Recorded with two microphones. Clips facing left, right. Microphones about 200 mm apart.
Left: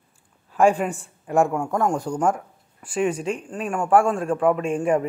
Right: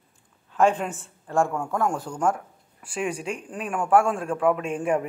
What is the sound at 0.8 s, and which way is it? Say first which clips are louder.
Speech: left 5 dB; centre (ahead or behind).